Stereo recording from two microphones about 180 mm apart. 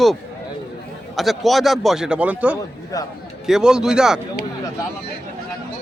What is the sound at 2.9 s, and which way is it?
Speech, 20° left (ahead or behind).